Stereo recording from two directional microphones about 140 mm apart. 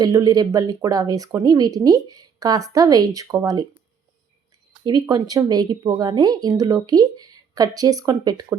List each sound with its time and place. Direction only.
0.0 s speech: 30° right (ahead or behind)
4.8 s speech: 30° right (ahead or behind)